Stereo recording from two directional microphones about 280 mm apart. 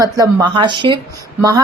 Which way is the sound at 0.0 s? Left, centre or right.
Centre.